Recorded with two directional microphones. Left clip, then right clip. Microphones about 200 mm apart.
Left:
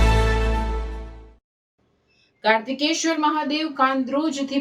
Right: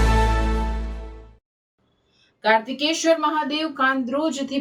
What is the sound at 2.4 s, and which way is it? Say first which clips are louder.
A woman's voice: right 1 dB; centre (ahead or behind).